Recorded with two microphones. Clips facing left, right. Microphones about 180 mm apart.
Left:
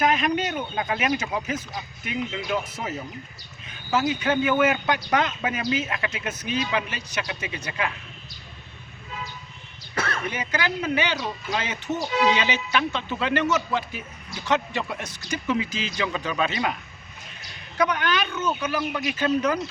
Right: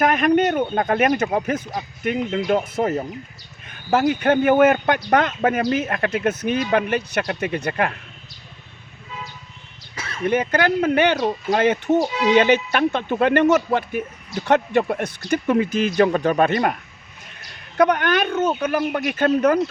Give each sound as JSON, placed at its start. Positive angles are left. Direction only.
{"t": 0.0, "sound": "speech", "side_deg": -55}
{"t": 9.9, "sound": "a sound", "side_deg": 60}
{"t": 10.2, "sound": "speech", "side_deg": -55}
{"t": 17.7, "sound": "speech", "side_deg": -55}